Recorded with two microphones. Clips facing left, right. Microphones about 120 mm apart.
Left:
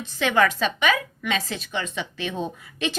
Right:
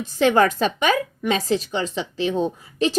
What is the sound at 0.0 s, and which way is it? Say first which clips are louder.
A woman's voice: right 4 dB; 40° right (ahead or behind).